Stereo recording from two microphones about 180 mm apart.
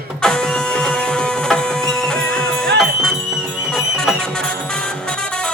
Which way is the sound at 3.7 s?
5° left (ahead or behind).